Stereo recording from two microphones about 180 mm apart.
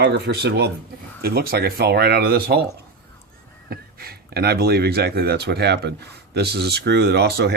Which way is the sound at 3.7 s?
60° right (ahead or behind).